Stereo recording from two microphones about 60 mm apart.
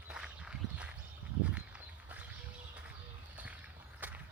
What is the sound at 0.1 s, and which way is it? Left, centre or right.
Walk, centre.